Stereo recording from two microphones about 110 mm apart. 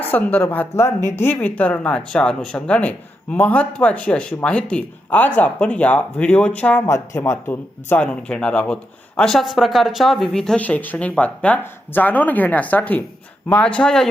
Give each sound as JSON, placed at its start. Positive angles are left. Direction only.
{"t": 0.0, "sound": "speech", "side_deg": 15}
{"t": 6.8, "sound": "speech", "side_deg": 25}